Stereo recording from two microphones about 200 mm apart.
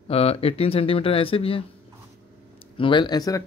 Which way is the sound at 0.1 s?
30° left (ahead or behind).